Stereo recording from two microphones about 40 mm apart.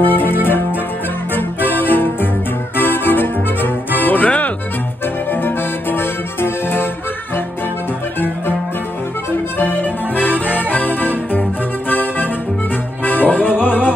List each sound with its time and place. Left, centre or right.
0.0 s music: left
5.3 s music: left
9.6 s music: left